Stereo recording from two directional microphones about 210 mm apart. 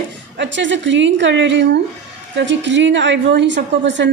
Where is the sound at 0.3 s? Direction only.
60° right (ahead or behind).